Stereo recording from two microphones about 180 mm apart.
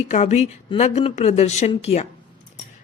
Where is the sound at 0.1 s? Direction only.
40° left (ahead or behind).